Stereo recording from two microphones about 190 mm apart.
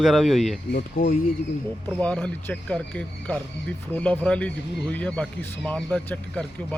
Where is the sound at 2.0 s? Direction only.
5° left (ahead or behind).